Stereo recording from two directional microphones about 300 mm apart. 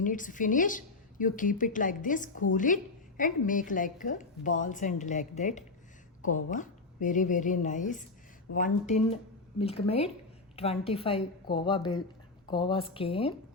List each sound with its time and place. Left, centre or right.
0.0 s a woman's voice: left